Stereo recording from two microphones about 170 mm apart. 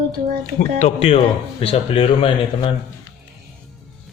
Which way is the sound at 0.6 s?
45° left (ahead or behind).